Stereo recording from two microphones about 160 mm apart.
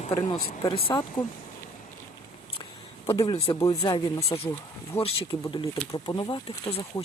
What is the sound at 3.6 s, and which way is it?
Speech, 20° left (ahead or behind).